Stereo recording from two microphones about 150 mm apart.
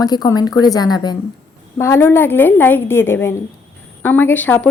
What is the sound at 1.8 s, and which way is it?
A woman's voice, 15° left (ahead or behind).